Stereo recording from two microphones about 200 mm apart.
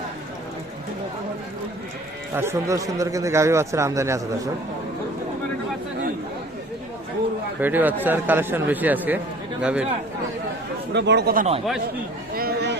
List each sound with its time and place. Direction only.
2.3 s a man's voice: 10° right (ahead or behind)
7.6 s a man's voice: 10° right (ahead or behind)
10.9 s speech: 60° right (ahead or behind)
12.3 s a sound: 50° right (ahead or behind)